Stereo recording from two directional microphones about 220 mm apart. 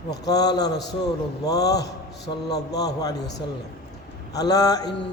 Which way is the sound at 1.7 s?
15° left (ahead or behind).